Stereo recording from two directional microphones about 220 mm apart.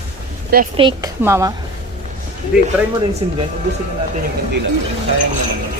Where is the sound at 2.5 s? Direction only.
5° right (ahead or behind).